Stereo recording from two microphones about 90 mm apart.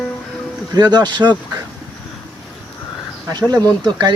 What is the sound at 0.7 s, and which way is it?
Speech, 50° right (ahead or behind).